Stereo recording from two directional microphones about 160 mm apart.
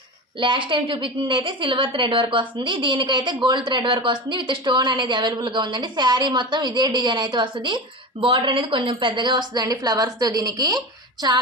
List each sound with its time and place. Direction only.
0.3 s a woman's voice: 30° right (ahead or behind)